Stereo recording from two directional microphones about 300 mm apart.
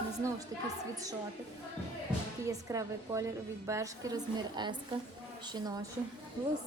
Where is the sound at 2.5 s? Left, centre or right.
Centre.